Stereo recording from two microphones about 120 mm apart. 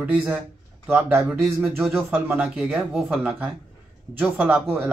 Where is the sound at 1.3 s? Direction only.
Centre (ahead or behind).